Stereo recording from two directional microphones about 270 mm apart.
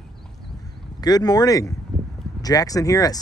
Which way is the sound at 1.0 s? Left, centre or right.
Centre.